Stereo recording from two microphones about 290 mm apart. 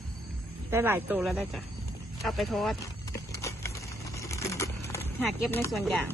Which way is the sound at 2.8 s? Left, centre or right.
Centre.